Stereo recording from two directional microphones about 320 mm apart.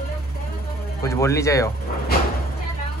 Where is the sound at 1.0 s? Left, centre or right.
Centre.